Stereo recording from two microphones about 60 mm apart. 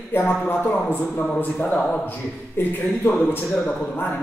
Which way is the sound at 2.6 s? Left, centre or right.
Left.